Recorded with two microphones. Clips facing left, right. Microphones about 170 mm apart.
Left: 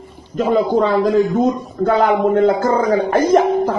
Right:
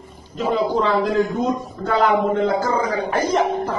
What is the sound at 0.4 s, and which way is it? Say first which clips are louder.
Speech: left 5 dB; 50° left (ahead or behind).